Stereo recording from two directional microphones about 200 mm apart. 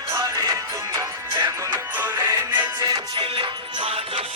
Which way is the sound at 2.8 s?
20° right (ahead or behind).